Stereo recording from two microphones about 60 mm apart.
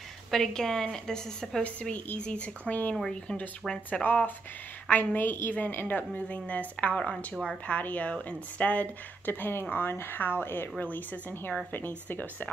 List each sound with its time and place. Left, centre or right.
0.3 s a woman's voice: centre
1.6 s a woman's voice: left
3.0 s a woman's voice: centre
4.0 s a woman's voice: left
9.3 s a woman's voice: left